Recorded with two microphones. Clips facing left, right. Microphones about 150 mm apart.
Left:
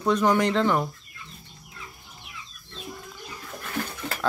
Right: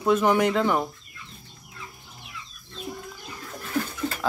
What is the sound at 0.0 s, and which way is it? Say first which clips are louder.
Speech: right 1 dB; 5° right (ahead or behind).